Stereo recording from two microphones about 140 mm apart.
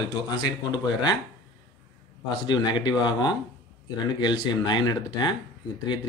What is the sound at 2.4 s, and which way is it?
Speech, 30° left (ahead or behind).